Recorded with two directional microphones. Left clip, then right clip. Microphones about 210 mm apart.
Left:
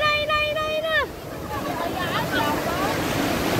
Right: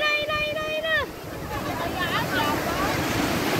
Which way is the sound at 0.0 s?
Centre (ahead or behind).